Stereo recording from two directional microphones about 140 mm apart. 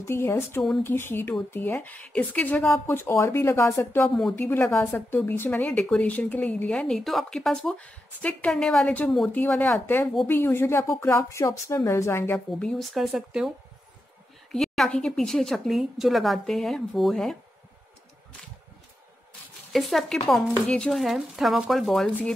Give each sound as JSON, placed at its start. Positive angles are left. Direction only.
{"t": 0.0, "sound": "speech", "side_deg": 20}
{"t": 4.1, "sound": "a woman's voice", "side_deg": 0}
{"t": 4.4, "sound": "speech", "side_deg": 15}
{"t": 12.4, "sound": "a woman's voice", "side_deg": 0}
{"t": 14.5, "sound": "a woman's voice", "side_deg": 5}
{"t": 19.7, "sound": "a woman's voice", "side_deg": 0}